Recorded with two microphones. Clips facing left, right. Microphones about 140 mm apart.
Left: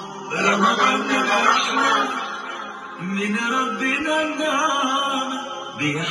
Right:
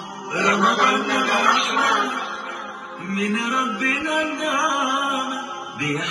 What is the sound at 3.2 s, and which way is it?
A man's voice, centre (ahead or behind).